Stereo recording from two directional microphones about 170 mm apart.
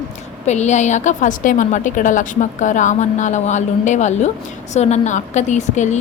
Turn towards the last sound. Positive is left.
turn(degrees=45)  # may be behind; listen again after turning